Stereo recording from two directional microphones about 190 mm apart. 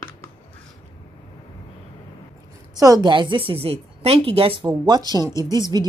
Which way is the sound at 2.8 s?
20° right (ahead or behind).